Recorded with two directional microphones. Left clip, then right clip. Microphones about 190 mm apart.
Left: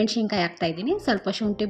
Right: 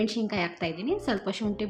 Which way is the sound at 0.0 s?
25° left (ahead or behind).